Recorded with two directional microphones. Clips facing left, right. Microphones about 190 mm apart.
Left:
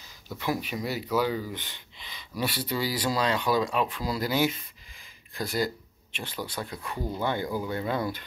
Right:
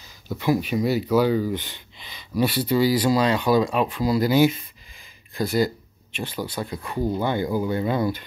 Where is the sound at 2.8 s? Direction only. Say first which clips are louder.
Right 8 dB; 15° right (ahead or behind).